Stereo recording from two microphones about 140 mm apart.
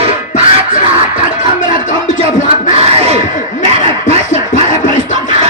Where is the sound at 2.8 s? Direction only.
45° right (ahead or behind).